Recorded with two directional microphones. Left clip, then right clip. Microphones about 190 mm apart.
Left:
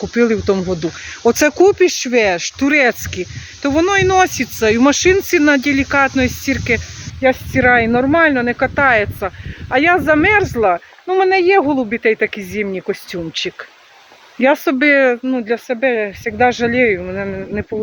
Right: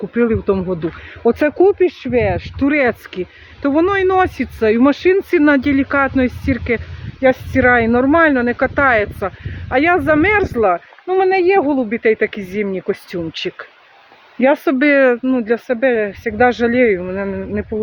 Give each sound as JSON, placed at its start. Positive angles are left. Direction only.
{"t": 0.1, "sound": "speech", "side_deg": 15}
{"t": 2.6, "sound": "speech", "side_deg": -5}